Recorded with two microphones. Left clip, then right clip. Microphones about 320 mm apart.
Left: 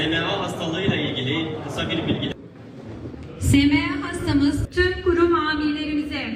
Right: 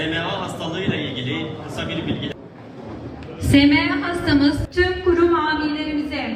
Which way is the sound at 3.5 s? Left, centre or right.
Left.